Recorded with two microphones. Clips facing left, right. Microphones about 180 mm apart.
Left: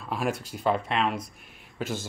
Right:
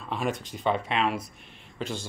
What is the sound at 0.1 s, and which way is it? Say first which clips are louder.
Speech: left 1 dB; 5° left (ahead or behind).